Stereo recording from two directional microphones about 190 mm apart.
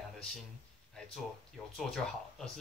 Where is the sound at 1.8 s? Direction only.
Centre (ahead or behind).